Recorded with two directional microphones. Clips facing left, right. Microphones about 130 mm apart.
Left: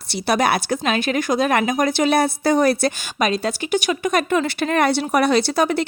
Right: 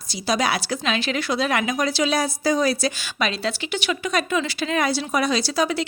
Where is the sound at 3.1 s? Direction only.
45° left (ahead or behind).